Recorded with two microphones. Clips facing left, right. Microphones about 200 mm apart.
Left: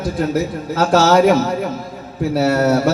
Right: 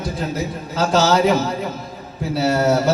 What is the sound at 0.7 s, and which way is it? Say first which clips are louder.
Speech: left 4 dB; 60° left (ahead or behind).